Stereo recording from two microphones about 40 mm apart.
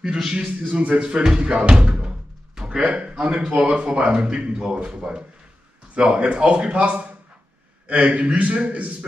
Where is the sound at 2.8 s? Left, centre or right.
Right.